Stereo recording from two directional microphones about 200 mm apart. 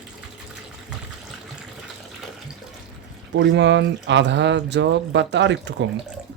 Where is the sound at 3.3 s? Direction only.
60° right (ahead or behind).